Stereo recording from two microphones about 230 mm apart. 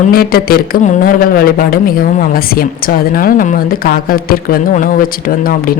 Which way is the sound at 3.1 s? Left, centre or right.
Left.